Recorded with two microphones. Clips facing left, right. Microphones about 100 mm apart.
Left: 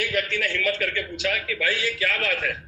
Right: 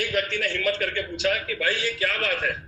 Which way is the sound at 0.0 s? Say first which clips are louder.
Even; 35° right (ahead or behind).